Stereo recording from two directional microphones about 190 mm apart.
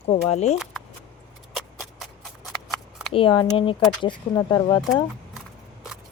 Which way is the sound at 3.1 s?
25° left (ahead or behind).